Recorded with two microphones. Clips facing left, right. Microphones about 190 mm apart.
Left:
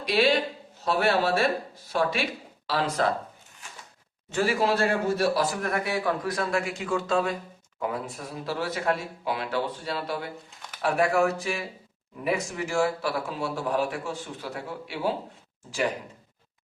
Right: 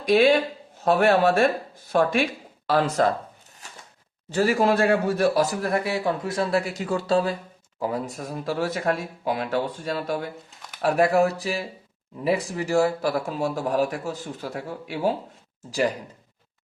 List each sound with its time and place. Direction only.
0.0 s speech: 50° right (ahead or behind)
3.6 s a sound: 40° right (ahead or behind)
4.3 s speech: 40° right (ahead or behind)